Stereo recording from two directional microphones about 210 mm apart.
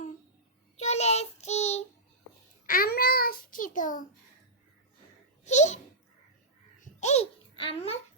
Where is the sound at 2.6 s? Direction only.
45° left (ahead or behind).